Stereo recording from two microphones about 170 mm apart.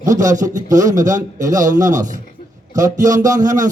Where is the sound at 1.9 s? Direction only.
50° right (ahead or behind).